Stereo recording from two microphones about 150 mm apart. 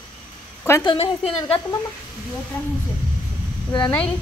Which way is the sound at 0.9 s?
40° left (ahead or behind).